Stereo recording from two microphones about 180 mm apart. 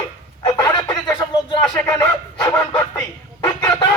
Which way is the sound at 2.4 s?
20° left (ahead or behind).